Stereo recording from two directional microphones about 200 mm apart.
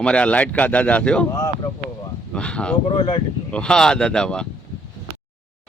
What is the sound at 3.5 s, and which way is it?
Speech, 5° left (ahead or behind).